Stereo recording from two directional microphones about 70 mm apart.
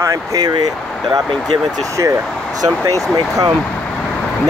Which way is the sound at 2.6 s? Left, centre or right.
Right.